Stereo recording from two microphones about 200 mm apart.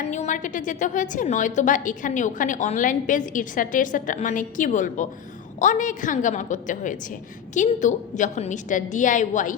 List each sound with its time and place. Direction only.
0.0 s a woman's voice: 35° left (ahead or behind)